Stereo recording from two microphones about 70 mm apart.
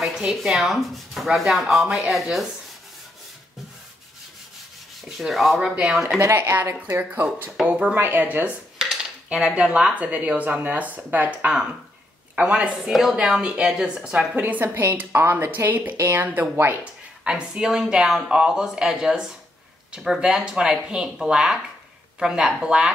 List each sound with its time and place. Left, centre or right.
0.0 s speech: centre
5.0 s rub: centre
5.8 s speech: centre
6.0 s speech: right
8.7 s speech: centre; by 11.5 s right
12.8 s speech: centre
13.3 s speech: centre
14.3 s speech: right
14.7 s speech: right
17.2 s speech: centre